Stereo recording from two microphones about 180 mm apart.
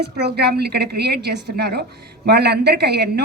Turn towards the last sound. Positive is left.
turn(degrees=-65)  # may be behind; listen again after turning